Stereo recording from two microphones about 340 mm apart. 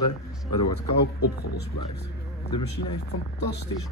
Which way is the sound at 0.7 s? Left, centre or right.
Left.